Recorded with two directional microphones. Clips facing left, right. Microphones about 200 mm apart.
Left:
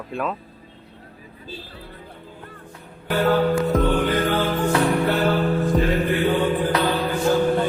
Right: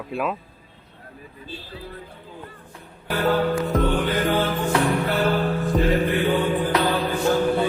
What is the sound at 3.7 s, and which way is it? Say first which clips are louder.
Music: right 1 dB; centre (ahead or behind).